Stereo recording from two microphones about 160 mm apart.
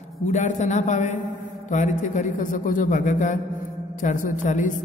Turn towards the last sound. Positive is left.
turn(degrees=50)  # may be behind; listen again after turning